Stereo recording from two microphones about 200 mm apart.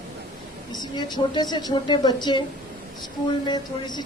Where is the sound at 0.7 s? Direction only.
20° left (ahead or behind).